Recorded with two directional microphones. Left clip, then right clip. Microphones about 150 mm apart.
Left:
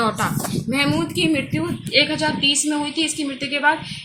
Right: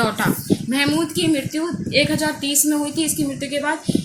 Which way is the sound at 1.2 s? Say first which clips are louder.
Even; centre (ahead or behind).